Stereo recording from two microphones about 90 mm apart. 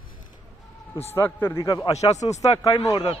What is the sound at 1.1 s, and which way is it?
Speech, 25° left (ahead or behind).